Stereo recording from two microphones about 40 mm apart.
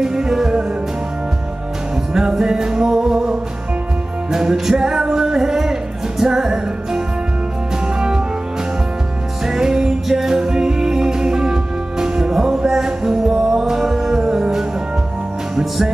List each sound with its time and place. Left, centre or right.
0.0 s music: centre
2.1 s music: centre
9.5 s music: centre